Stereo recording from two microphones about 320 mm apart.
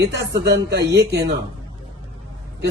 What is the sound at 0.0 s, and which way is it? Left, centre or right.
Speech, right.